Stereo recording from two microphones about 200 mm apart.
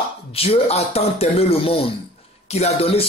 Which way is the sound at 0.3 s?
30° left (ahead or behind).